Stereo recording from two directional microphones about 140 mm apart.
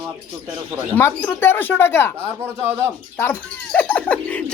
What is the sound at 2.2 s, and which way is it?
Speech, 15° right (ahead or behind).